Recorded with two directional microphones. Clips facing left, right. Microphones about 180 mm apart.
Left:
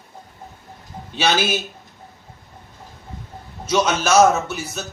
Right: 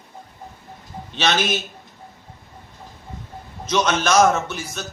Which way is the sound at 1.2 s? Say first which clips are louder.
Left 1 dB; 10° left (ahead or behind).